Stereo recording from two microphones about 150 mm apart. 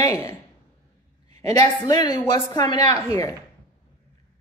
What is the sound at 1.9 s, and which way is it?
A woman's voice, 25° left (ahead or behind).